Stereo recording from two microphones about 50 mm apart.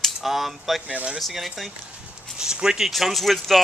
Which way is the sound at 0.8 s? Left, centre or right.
Right.